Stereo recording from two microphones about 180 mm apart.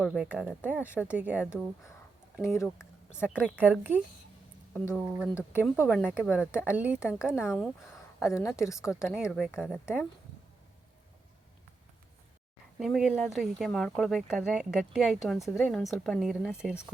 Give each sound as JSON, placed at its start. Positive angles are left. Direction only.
{"t": 0.0, "sound": "speech", "side_deg": -5}
{"t": 2.4, "sound": "speech", "side_deg": 15}
{"t": 3.2, "sound": "speech", "side_deg": -5}
{"t": 5.3, "sound": "speech", "side_deg": 10}
{"t": 5.8, "sound": "speech", "side_deg": -5}
{"t": 12.8, "sound": "speech", "side_deg": -5}